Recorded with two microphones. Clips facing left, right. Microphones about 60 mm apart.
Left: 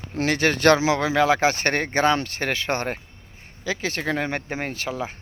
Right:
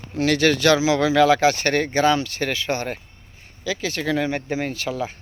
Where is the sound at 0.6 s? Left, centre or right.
Left.